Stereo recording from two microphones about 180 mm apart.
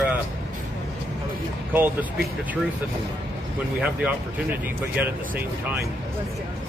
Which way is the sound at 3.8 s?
5° right (ahead or behind).